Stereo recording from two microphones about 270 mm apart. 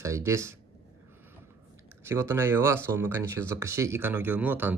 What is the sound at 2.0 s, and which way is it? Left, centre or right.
Speech, centre.